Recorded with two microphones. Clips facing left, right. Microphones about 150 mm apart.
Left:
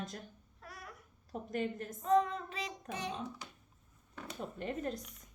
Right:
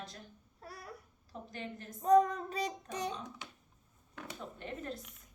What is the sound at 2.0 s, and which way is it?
Child singing, 40° right (ahead or behind).